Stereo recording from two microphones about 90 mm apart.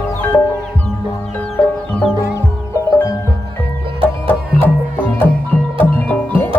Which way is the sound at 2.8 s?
35° left (ahead or behind).